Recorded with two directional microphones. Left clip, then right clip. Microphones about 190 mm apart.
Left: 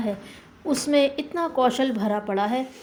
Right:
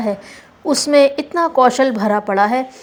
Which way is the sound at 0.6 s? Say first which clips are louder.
Right 9 dB; 20° right (ahead or behind).